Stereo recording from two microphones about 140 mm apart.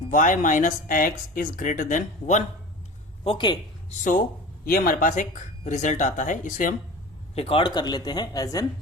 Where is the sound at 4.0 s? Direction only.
75° left (ahead or behind).